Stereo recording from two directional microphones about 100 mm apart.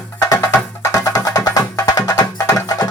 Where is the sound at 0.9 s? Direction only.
35° left (ahead or behind).